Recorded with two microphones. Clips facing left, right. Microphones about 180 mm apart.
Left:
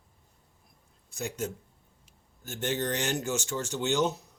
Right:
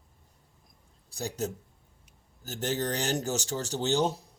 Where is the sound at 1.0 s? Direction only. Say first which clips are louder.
Right 1 dB; 35° right (ahead or behind).